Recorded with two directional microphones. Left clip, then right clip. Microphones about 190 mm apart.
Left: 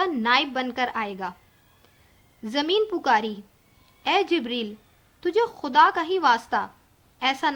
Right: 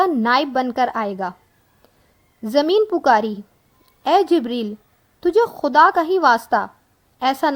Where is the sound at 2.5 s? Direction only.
55° right (ahead or behind).